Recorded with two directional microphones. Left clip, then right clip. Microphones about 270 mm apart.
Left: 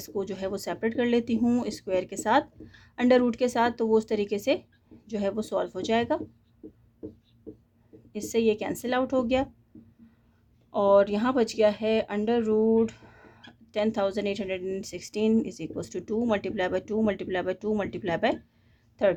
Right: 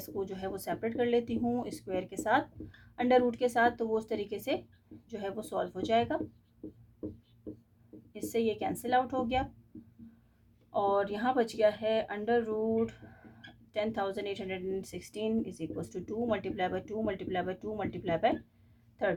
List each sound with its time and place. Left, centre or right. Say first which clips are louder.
0.0 s speech: left 6 dB; left
8.1 s speech: left 7 dB; left
10.7 s speech: left 9 dB; left